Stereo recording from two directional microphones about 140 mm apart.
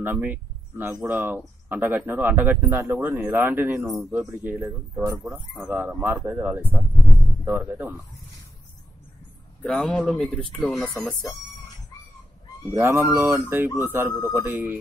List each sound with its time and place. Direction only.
0.0 s speech: 15° right (ahead or behind)
3.9 s speech: 5° right (ahead or behind)
7.0 s music: centre (ahead or behind)
7.4 s speech: 15° right (ahead or behind)
9.6 s speech: 5° left (ahead or behind)
12.7 s speech: 20° right (ahead or behind)